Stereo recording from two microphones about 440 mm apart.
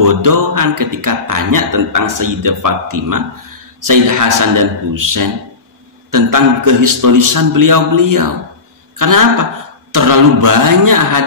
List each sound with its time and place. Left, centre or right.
0.0 s speech: right